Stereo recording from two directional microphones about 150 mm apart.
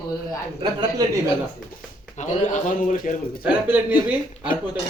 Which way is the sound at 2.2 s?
60° left (ahead or behind).